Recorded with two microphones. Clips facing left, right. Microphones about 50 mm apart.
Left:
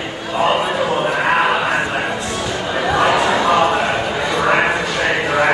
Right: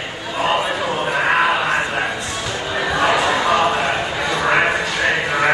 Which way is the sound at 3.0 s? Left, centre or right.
Centre.